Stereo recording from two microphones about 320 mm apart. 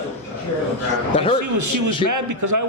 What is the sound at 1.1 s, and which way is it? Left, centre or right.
Speech, centre.